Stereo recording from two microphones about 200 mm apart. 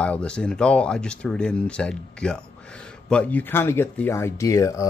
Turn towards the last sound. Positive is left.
turn(degrees=15)  # may be behind; listen again after turning